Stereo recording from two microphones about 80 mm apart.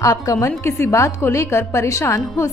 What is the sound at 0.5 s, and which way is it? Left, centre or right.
A woman's voice, left.